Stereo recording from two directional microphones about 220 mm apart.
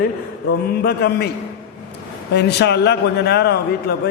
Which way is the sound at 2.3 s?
50° left (ahead or behind).